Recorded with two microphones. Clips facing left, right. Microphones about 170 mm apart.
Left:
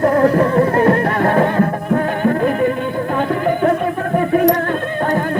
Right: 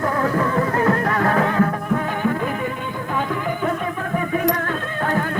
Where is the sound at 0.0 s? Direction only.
45° left (ahead or behind).